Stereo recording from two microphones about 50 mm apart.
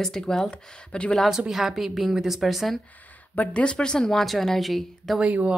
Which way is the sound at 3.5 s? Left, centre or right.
Centre.